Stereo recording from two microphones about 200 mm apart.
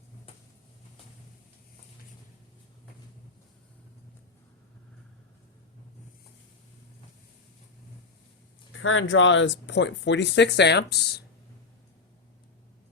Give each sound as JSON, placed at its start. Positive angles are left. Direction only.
{"t": 8.7, "sound": "speech", "side_deg": 85}